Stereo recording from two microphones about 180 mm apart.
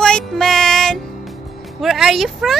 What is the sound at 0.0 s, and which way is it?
Music, 5° left (ahead or behind).